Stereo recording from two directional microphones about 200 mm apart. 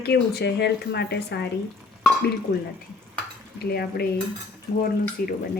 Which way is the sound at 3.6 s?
50° left (ahead or behind).